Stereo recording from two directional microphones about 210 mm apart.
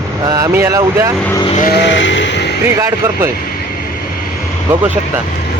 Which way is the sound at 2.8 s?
15° right (ahead or behind).